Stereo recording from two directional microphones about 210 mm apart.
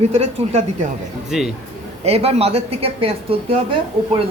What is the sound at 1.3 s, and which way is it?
Speech, 5° right (ahead or behind).